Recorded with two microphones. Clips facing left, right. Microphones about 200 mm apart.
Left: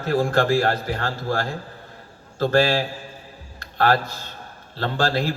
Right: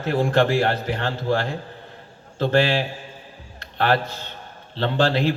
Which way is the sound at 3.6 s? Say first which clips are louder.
Left 2 dB; 40° left (ahead or behind).